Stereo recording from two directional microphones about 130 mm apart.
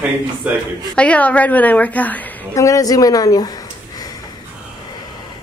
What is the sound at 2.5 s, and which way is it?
Speech, 25° left (ahead or behind).